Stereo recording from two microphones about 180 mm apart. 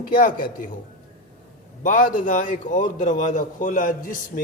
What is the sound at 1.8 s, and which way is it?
A man's voice, 45° left (ahead or behind).